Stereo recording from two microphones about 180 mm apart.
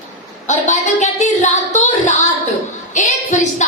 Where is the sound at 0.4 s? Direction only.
40° left (ahead or behind).